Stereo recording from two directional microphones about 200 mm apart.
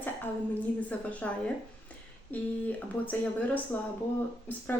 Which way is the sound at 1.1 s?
5° left (ahead or behind).